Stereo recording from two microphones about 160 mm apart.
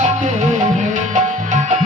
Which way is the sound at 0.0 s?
50° right (ahead or behind).